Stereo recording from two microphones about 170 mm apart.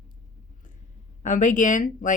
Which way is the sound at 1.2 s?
50° left (ahead or behind).